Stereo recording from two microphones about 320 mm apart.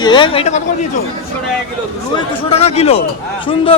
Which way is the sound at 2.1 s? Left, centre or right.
Centre.